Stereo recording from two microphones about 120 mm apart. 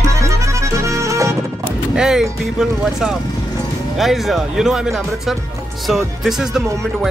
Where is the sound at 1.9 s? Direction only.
5° right (ahead or behind).